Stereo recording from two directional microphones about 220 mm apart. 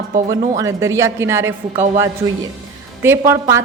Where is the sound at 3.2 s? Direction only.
10° right (ahead or behind).